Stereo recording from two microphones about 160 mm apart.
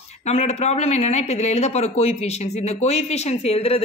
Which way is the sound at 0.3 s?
40° left (ahead or behind).